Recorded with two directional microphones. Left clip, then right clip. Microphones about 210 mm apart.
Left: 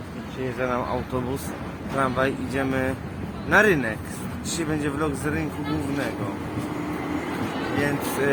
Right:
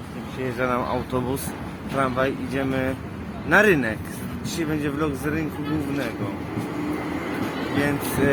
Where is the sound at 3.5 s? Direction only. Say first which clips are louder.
Right 1 dB; 25° right (ahead or behind).